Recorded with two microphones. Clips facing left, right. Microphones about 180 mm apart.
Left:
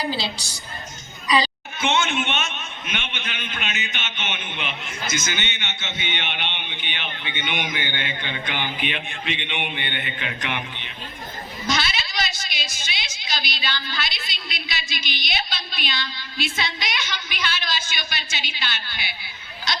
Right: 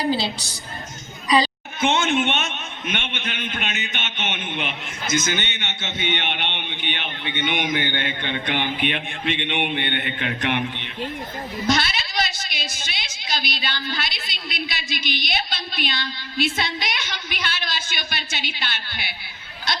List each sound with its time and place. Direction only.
0.0 s a man's voice: 50° right (ahead or behind)
11.7 s a woman's voice: 55° right (ahead or behind)